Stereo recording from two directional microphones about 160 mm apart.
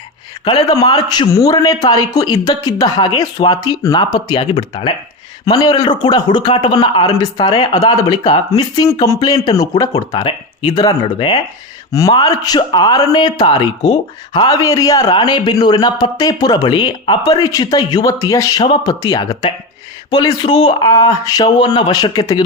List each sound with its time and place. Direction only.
0.7 s a man's voice: 25° left (ahead or behind)
20.6 s speech: 40° left (ahead or behind)
20.9 s a man's voice: 25° left (ahead or behind)